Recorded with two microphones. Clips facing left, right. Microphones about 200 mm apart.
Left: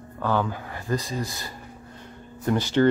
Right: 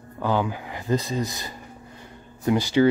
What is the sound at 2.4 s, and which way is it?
Speech, 10° right (ahead or behind).